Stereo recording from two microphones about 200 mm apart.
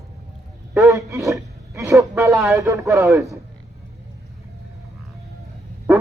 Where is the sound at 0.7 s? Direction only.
15° right (ahead or behind).